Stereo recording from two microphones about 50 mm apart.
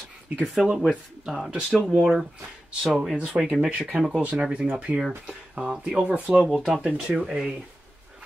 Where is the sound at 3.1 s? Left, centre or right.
Right.